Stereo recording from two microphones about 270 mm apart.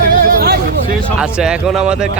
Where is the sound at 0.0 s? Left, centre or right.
Right.